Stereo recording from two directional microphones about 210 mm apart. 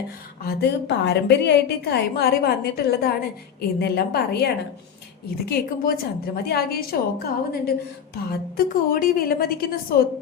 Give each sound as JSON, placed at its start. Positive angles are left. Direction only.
{"t": 0.4, "sound": "a woman's voice", "side_deg": 55}